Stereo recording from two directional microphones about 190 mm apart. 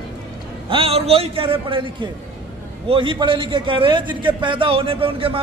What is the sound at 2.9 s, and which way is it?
A man's voice, 25° right (ahead or behind).